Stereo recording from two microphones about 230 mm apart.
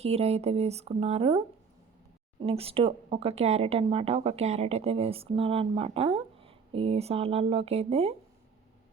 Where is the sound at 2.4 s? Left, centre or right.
Right.